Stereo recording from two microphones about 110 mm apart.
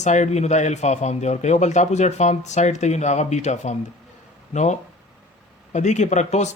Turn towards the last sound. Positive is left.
turn(degrees=90)